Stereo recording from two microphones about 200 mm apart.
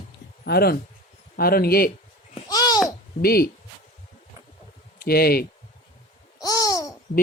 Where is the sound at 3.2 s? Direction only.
50° left (ahead or behind).